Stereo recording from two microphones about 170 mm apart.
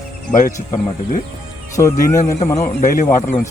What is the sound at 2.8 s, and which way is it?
Speech, 50° left (ahead or behind).